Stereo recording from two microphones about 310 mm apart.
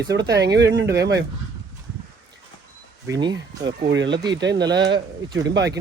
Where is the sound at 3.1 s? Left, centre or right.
Centre.